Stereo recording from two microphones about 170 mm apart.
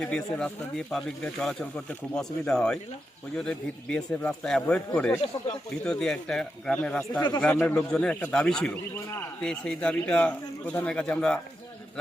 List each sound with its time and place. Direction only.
0.0 s speech: 5° left (ahead or behind)
5.8 s speech: 5° left (ahead or behind)
7.2 s speech: 25° left (ahead or behind)
7.4 s speech: 10° left (ahead or behind)